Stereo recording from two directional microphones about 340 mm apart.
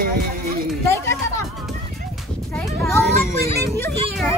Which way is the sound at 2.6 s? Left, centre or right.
Centre.